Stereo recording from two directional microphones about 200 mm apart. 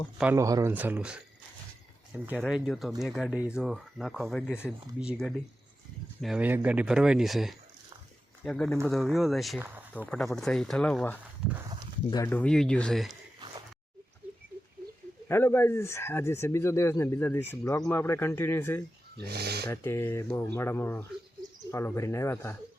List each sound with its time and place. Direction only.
0.2 s speech: 10° right (ahead or behind)
2.3 s speech: 5° left (ahead or behind)
10.3 s speech: centre (ahead or behind)
15.3 s speech: 10° left (ahead or behind)
19.1 s speech: 55° right (ahead or behind)
19.6 s speech: 10° left (ahead or behind)